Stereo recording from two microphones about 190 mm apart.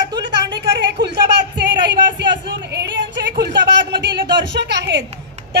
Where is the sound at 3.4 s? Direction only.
70° right (ahead or behind).